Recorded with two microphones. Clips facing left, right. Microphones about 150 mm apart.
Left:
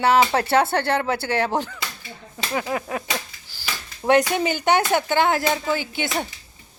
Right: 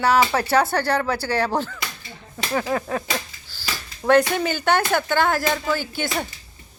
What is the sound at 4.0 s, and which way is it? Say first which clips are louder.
Speech: right 1 dB; 15° left (ahead or behind).